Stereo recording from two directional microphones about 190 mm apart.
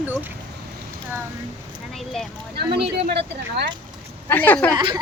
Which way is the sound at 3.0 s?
55° right (ahead or behind).